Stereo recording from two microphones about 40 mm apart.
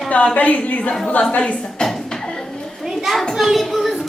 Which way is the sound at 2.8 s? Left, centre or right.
Centre.